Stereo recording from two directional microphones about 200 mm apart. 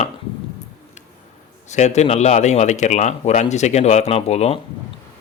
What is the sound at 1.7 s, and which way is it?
Speech, 35° left (ahead or behind).